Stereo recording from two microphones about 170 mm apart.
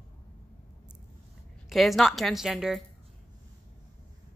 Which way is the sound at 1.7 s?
Centre (ahead or behind).